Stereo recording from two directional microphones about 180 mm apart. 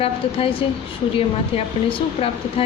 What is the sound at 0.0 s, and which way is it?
A woman's voice, 30° left (ahead or behind).